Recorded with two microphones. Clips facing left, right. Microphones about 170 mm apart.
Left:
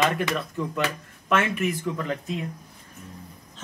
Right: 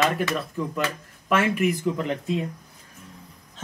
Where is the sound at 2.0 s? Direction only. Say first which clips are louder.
Right 3 dB; 25° right (ahead or behind).